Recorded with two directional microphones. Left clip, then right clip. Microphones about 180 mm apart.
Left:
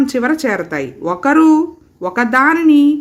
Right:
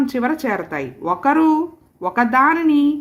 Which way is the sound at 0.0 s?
15° left (ahead or behind).